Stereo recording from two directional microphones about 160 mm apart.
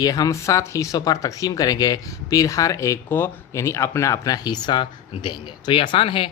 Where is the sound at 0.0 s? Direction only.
20° left (ahead or behind).